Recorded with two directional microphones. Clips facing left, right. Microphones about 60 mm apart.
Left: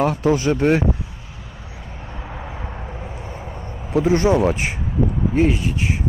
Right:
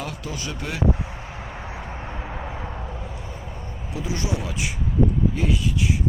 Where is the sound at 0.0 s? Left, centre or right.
Left.